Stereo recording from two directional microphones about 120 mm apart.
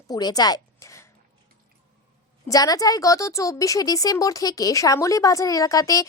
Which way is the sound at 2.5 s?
30° left (ahead or behind).